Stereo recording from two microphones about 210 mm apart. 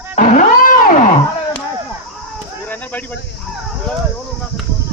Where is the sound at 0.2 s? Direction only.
35° left (ahead or behind).